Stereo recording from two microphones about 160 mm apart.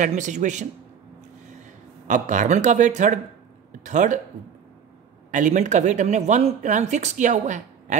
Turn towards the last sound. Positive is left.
turn(degrees=-50)  # may be behind; listen again after turning